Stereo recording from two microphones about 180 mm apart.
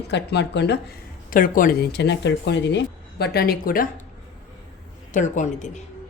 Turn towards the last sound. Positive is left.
turn(degrees=40)  # may be behind; listen again after turning